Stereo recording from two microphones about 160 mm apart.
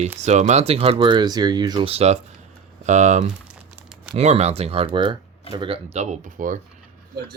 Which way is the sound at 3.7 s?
5° right (ahead or behind).